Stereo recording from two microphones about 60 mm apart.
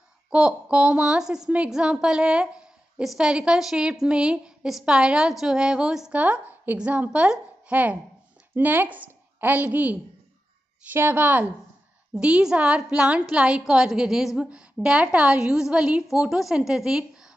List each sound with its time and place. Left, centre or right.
0.3 s a woman's voice: centre
6.1 s a woman's voice: right
16.1 s a woman's voice: centre